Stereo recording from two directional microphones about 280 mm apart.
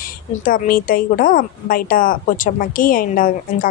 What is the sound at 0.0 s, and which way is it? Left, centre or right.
A woman's voice, left.